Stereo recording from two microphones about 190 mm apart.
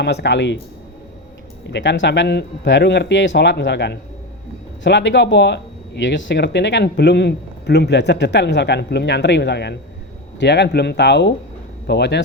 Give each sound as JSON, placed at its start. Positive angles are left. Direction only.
{"t": 0.0, "sound": "speech", "side_deg": 65}
{"t": 1.6, "sound": "speech", "side_deg": 65}